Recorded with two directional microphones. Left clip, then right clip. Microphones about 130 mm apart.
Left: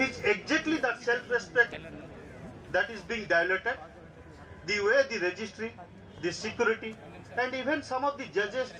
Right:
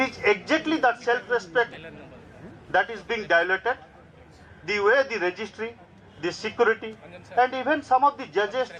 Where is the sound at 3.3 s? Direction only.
35° right (ahead or behind).